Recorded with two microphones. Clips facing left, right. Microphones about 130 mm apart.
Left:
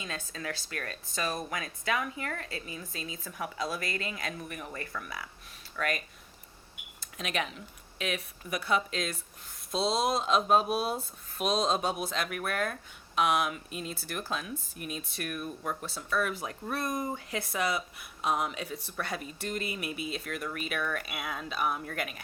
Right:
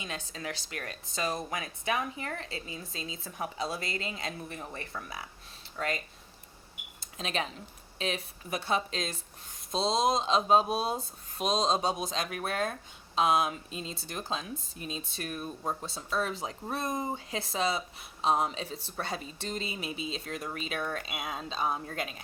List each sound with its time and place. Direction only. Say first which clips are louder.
0.0 s speech: even; 20° right (ahead or behind)
7.0 s speech: even; 30° right (ahead or behind)